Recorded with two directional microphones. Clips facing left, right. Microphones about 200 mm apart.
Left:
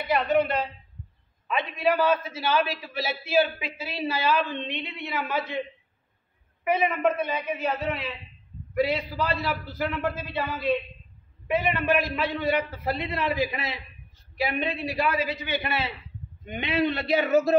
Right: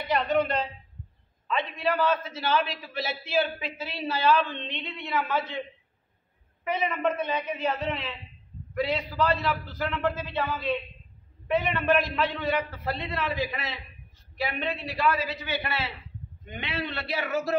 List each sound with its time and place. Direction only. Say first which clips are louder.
0.1 s a man's voice: left 2 dB; 5° left (ahead or behind)
6.6 s a man's voice: left 4 dB; 10° left (ahead or behind)